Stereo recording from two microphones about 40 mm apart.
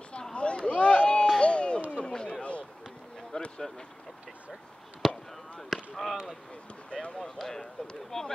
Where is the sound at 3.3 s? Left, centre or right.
Left.